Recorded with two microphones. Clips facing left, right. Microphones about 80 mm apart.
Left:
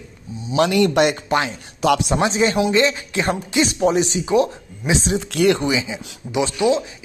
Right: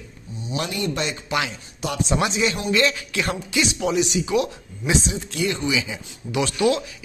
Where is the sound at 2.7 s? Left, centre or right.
Left.